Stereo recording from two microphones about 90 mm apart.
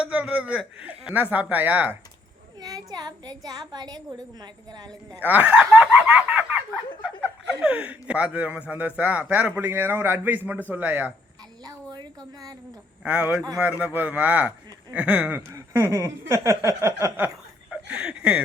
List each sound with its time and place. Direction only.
0.0 s speech: 10° right (ahead or behind)
2.6 s a woman's voice: 50° right (ahead or behind)
5.2 s a man's voice: 20° right (ahead or behind)
11.6 s speech: 45° right (ahead or behind)
13.0 s speech: 15° right (ahead or behind)
15.7 s a sound: 35° right (ahead or behind)
17.7 s a sound: 10° right (ahead or behind)